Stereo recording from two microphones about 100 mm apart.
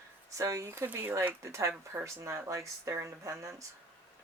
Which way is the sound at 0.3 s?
30° right (ahead or behind).